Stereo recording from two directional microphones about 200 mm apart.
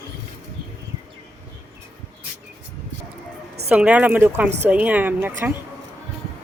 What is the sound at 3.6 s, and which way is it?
A woman's voice, 5° right (ahead or behind).